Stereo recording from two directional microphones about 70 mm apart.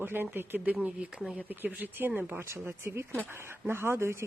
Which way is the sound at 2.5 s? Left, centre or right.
Right.